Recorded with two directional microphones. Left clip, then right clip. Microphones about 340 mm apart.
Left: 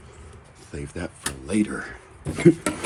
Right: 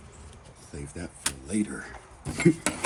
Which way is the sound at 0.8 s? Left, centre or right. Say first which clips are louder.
Left 4 dB; centre.